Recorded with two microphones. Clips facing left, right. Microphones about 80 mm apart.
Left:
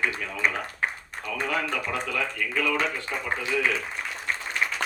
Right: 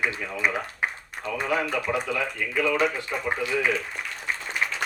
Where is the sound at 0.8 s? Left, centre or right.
Centre.